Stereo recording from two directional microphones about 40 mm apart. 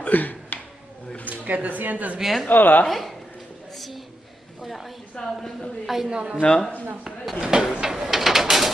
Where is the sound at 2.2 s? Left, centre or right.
Centre.